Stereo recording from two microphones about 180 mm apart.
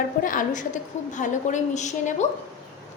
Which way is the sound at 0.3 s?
45° left (ahead or behind).